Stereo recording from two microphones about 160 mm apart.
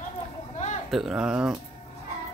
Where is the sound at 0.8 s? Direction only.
Centre (ahead or behind).